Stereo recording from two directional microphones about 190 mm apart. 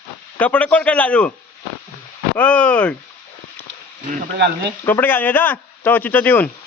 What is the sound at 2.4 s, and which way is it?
Speech, 5° left (ahead or behind).